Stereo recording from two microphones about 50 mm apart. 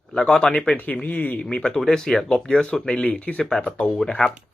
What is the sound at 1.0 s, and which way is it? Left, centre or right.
Speech, left.